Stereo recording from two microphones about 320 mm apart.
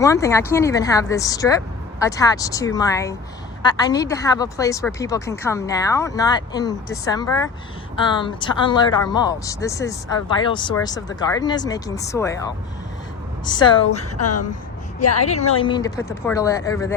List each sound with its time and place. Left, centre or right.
0.0 s speech: centre
13.4 s speech: centre
13.9 s a woman's voice: left
15.3 s speech: centre